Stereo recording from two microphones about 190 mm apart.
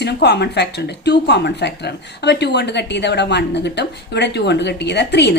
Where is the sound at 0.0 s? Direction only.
60° left (ahead or behind).